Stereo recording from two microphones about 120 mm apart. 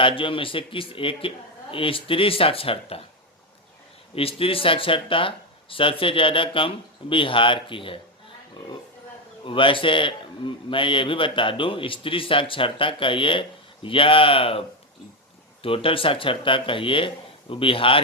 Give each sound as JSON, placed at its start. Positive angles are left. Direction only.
{"t": 0.0, "sound": "a man's voice", "side_deg": 45}
{"t": 4.1, "sound": "a man's voice", "side_deg": 50}
{"t": 9.4, "sound": "a man's voice", "side_deg": 45}
{"t": 15.6, "sound": "a man's voice", "side_deg": 50}